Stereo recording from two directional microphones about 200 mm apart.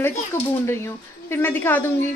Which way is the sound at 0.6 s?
10° left (ahead or behind).